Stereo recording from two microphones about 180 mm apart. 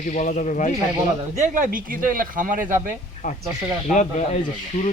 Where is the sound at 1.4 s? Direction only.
45° right (ahead or behind).